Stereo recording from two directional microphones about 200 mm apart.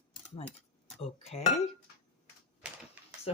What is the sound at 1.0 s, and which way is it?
Speech, 30° left (ahead or behind).